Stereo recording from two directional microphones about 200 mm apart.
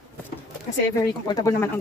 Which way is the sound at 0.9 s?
20° left (ahead or behind).